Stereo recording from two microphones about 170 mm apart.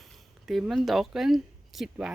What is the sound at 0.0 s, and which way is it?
Speech, centre (ahead or behind).